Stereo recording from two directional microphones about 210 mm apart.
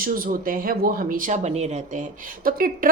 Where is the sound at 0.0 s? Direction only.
40° right (ahead or behind).